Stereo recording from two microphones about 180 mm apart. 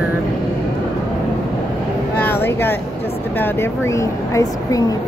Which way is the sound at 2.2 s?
10° left (ahead or behind).